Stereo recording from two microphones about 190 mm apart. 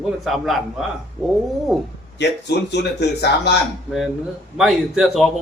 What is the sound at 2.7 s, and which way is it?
Speech, 60° left (ahead or behind).